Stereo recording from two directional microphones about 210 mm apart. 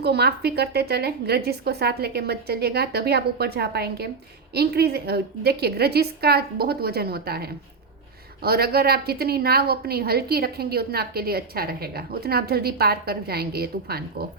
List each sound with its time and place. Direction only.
0.0 s a woman's voice: 50° right (ahead or behind)